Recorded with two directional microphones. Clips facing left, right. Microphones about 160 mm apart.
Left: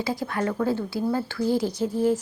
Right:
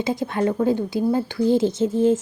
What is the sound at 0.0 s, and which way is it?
A woman's voice, 20° right (ahead or behind).